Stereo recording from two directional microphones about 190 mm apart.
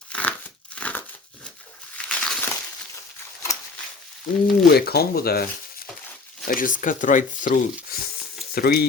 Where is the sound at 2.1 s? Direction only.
5° left (ahead or behind).